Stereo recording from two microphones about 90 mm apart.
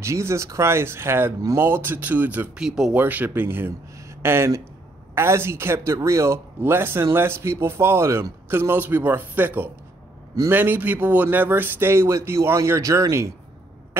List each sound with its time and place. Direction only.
0.0 s speech: 30° right (ahead or behind)
2.5 s speech: 5° right (ahead or behind)
2.9 s speech: 20° right (ahead or behind)